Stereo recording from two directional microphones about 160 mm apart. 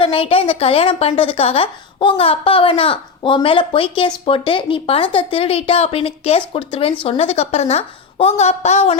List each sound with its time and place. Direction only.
0.0 s a woman's voice: 35° left (ahead or behind)